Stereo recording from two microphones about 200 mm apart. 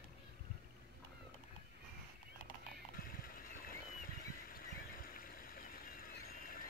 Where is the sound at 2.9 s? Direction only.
45° left (ahead or behind).